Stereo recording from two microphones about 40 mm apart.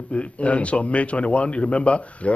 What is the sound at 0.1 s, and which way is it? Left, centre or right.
A man's voice, left.